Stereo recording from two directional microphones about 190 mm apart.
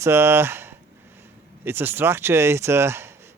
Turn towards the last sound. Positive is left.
turn(degrees=-15)  # may be behind; listen again after turning